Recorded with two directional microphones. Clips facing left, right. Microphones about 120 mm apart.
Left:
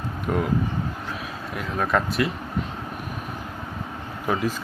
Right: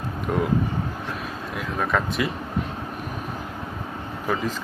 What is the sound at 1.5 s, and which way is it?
Speech, centre (ahead or behind).